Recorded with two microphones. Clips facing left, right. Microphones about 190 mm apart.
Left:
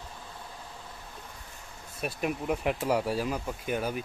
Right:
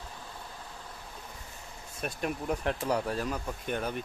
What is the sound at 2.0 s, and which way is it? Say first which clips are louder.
Speech: left 2 dB; 5° left (ahead or behind).